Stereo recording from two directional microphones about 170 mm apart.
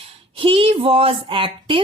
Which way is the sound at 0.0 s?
35° right (ahead or behind).